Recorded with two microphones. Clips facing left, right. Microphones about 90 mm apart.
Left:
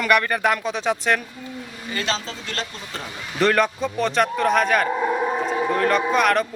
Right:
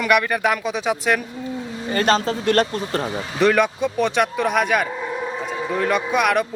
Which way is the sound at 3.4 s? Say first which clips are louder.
Right 2 dB; 5° right (ahead or behind).